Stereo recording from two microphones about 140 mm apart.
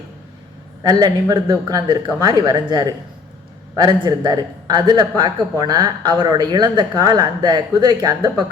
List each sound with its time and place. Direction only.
0.8 s a man's voice: 30° right (ahead or behind)